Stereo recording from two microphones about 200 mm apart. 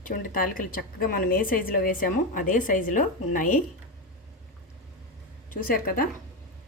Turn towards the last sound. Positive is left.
turn(degrees=45)  # may be behind; listen again after turning